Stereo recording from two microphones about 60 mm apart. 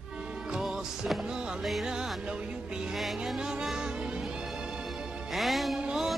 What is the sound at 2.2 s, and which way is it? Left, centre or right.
Music, centre.